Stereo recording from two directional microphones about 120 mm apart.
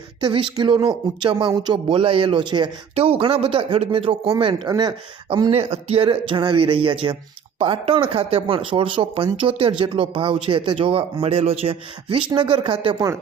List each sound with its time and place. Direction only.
0.2 s speech: 45° right (ahead or behind)
2.9 s speech: 55° right (ahead or behind); by 5.5 s 35° right (ahead or behind)
5.5 s speech: 55° right (ahead or behind)